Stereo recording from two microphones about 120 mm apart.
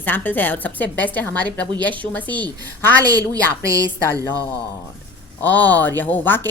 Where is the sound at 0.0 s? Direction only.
15° left (ahead or behind).